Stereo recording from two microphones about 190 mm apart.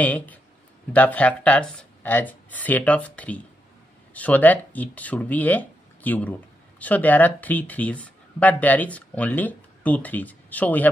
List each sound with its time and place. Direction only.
0.0 s speech: 10° left (ahead or behind)